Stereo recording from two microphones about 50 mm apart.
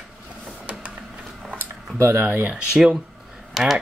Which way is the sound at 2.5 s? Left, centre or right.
Centre.